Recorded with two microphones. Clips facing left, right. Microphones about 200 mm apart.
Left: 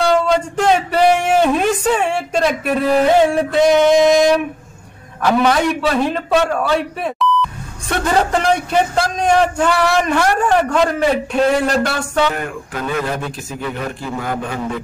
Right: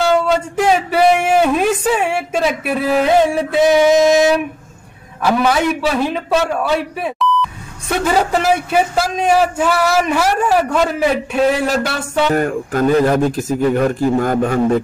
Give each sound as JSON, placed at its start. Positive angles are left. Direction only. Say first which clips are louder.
{"t": 0.0, "sound": "speech", "louder": "even", "side_deg": -5}
{"t": 12.3, "sound": "speech", "louder": "right 7 dB", "side_deg": -45}